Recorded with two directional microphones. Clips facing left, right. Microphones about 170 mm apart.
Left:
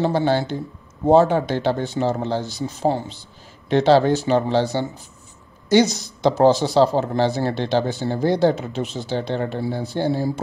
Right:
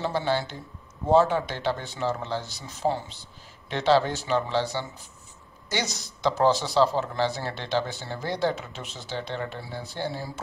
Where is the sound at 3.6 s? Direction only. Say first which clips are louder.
Left 7 dB; 35° left (ahead or behind).